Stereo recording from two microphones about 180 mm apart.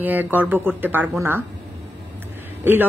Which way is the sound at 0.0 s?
10° right (ahead or behind).